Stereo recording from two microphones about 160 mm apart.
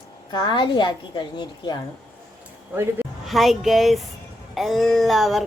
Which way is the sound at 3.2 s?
Centre (ahead or behind).